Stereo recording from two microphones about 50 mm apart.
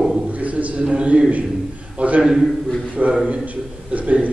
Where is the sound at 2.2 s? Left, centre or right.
Centre.